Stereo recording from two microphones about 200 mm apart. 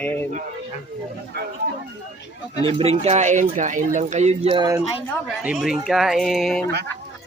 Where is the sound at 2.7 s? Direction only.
30° right (ahead or behind).